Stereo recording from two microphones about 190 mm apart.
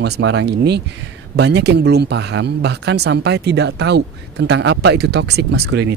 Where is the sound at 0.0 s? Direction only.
75° right (ahead or behind).